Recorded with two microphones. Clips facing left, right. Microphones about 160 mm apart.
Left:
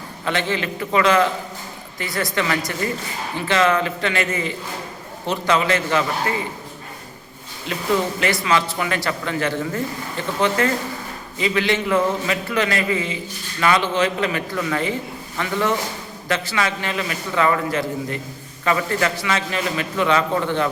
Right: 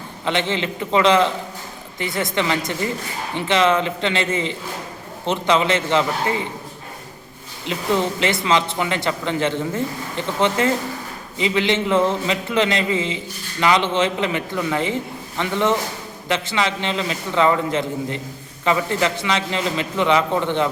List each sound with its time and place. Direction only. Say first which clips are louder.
0.3 s a man's voice: right 1 dB; 20° right (ahead or behind)
7.6 s a man's voice: right 1 dB; 20° right (ahead or behind)